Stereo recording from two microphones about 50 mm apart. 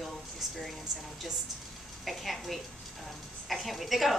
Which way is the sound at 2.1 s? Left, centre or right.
Centre.